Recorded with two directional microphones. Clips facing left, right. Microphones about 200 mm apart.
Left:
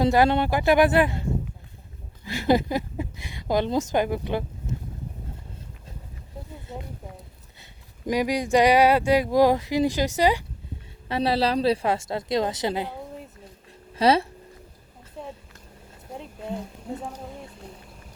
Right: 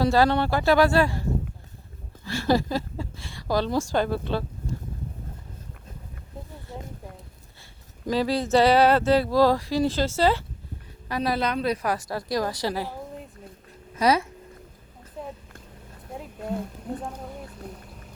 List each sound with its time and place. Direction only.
0.0 s a woman's voice: 20° left (ahead or behind)
2.2 s a woman's voice: 20° left (ahead or behind)
6.7 s a woman's voice: 20° left (ahead or behind)
8.0 s speech: 15° left (ahead or behind)
11.1 s a woman's voice: 30° left (ahead or behind)
15.2 s a sound: centre (ahead or behind)
16.1 s speech: centre (ahead or behind)